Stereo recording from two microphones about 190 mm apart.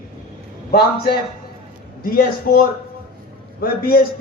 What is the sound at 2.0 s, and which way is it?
A man's voice, 45° left (ahead or behind).